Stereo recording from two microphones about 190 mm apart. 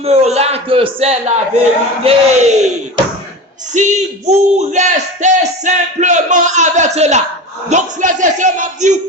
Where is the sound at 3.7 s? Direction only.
35° right (ahead or behind).